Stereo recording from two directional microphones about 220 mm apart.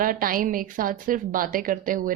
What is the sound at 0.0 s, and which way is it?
A woman's voice, 40° right (ahead or behind).